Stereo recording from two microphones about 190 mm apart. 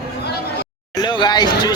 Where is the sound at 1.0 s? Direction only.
20° left (ahead or behind).